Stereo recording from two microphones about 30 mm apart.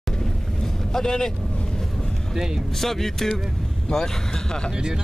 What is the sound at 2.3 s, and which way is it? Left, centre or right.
Speech, centre.